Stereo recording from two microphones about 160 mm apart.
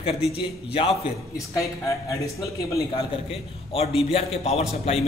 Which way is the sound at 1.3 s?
20° left (ahead or behind).